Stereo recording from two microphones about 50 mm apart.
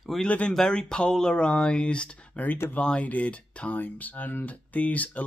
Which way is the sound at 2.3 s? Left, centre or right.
Left.